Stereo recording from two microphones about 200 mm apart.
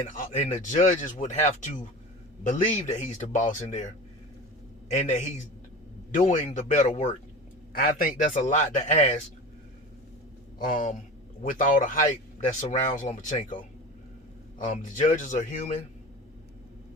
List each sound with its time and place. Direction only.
0.1 s speech: 35° left (ahead or behind)
10.6 s speech: 40° left (ahead or behind)
14.6 s speech: 40° left (ahead or behind)